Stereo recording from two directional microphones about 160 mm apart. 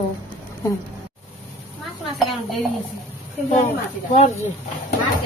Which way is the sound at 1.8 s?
Centre (ahead or behind).